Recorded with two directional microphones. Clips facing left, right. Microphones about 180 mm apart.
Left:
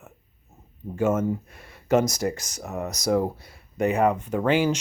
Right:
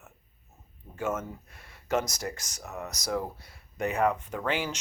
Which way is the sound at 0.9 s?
30° left (ahead or behind).